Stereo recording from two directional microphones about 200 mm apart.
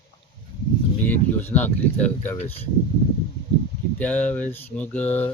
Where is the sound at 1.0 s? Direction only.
10° left (ahead or behind).